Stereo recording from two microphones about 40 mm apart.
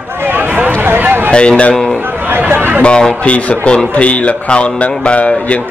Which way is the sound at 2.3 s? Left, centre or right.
Right.